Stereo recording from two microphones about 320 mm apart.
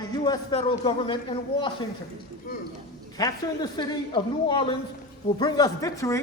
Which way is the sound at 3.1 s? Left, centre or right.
Centre.